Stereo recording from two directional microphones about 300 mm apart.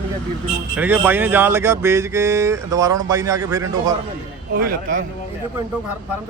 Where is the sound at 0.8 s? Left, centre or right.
Centre.